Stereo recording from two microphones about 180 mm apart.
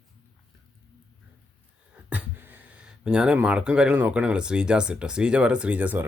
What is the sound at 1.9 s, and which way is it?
Speech, 10° right (ahead or behind).